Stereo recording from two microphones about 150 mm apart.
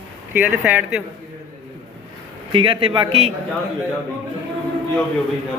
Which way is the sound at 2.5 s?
35° right (ahead or behind).